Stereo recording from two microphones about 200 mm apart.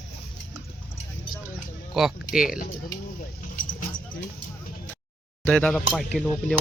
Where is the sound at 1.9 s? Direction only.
Centre (ahead or behind).